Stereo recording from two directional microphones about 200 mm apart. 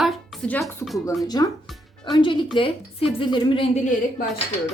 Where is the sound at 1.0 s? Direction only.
20° left (ahead or behind).